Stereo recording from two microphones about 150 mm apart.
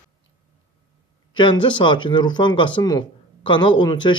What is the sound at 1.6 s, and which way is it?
A man's voice, 30° left (ahead or behind).